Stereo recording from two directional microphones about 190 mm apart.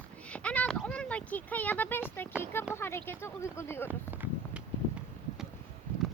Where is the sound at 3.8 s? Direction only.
10° right (ahead or behind).